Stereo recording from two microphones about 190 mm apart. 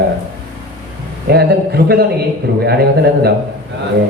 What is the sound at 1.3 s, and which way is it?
A man's voice, 60° right (ahead or behind).